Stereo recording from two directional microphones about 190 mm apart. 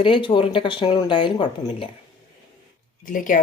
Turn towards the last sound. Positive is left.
turn(degrees=45)  # may be behind; listen again after turning